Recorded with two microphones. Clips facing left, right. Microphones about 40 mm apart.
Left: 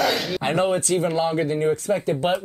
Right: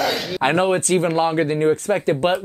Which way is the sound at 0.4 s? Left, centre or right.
Right.